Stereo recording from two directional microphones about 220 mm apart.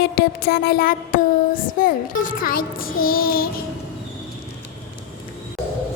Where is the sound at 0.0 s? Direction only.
45° left (ahead or behind).